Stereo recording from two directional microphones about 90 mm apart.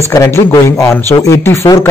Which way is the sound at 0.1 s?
35° left (ahead or behind).